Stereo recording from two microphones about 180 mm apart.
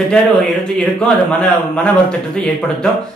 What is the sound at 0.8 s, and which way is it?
A man's voice, 5° left (ahead or behind).